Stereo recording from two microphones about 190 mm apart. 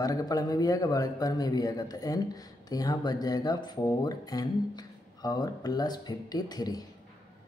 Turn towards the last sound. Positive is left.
turn(degrees=20)  # may be behind; listen again after turning